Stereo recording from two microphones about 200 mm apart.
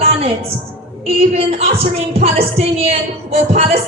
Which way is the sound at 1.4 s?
30° right (ahead or behind).